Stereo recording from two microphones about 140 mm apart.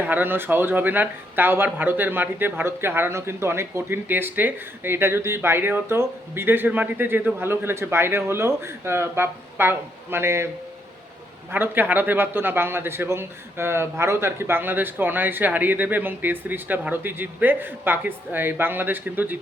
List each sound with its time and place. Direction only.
0.0 s a man's voice: 15° right (ahead or behind)
11.5 s a man's voice: 15° right (ahead or behind)